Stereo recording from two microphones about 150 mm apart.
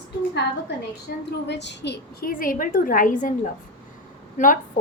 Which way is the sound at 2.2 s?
70° left (ahead or behind).